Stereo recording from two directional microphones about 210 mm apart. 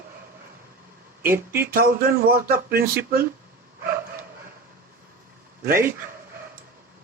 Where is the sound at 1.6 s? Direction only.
45° right (ahead or behind).